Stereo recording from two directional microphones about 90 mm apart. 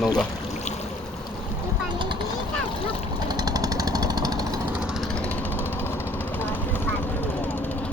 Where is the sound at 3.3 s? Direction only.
45° right (ahead or behind).